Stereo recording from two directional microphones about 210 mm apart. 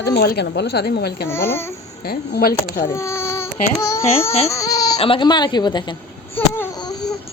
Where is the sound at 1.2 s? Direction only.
10° left (ahead or behind).